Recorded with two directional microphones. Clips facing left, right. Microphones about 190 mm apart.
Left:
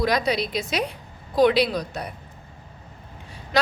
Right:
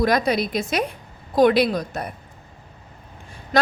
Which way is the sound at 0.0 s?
50° right (ahead or behind).